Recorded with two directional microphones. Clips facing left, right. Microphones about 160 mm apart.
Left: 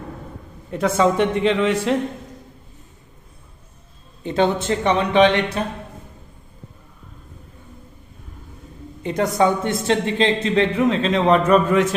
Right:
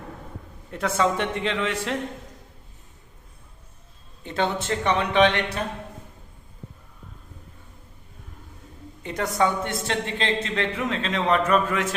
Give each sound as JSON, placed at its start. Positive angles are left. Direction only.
{"t": 0.7, "sound": "speech", "side_deg": 15}
{"t": 4.2, "sound": "speech", "side_deg": 20}
{"t": 9.0, "sound": "speech", "side_deg": 20}